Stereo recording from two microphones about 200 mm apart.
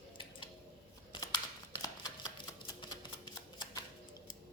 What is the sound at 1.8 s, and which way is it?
Typewriter, 20° left (ahead or behind).